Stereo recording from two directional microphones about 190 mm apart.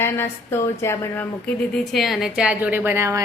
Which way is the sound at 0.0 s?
10° left (ahead or behind).